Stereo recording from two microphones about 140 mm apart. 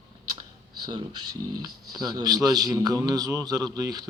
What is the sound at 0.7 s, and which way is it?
Speech, 30° right (ahead or behind).